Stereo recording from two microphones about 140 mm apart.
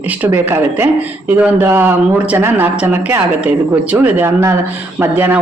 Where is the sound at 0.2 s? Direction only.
15° right (ahead or behind).